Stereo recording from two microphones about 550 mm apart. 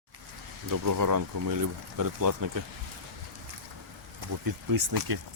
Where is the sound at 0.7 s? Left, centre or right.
Right.